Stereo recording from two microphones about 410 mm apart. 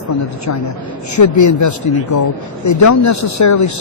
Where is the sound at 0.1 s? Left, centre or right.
Left.